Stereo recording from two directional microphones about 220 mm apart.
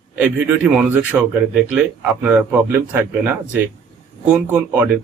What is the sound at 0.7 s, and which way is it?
Speech, 10° right (ahead or behind).